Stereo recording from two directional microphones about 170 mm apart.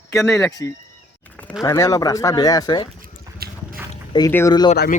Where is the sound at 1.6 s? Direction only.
20° left (ahead or behind).